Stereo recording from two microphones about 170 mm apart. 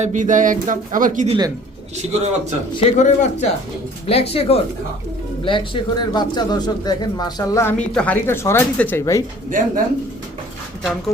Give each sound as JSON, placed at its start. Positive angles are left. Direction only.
{"t": 0.0, "sound": "speech", "side_deg": -45}
{"t": 1.3, "sound": "speech", "side_deg": -25}
{"t": 2.0, "sound": "a man's voice", "side_deg": -40}
{"t": 2.7, "sound": "speech", "side_deg": 40}
{"t": 9.5, "sound": "speech", "side_deg": -50}